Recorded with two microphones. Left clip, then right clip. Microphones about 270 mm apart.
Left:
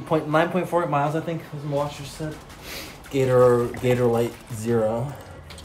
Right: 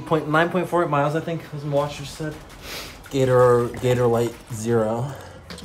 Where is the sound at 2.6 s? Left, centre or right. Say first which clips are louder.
Right 2 dB; centre.